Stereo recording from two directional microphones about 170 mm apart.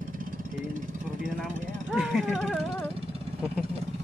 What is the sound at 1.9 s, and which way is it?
Speech, centre (ahead or behind).